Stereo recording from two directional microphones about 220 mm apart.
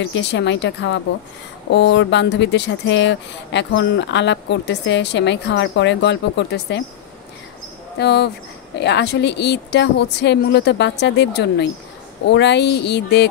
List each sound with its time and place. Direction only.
0.0 s speech: 55° left (ahead or behind)
8.0 s speech: 50° left (ahead or behind)